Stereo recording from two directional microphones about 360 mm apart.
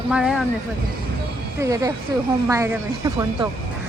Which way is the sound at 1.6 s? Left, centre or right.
Centre.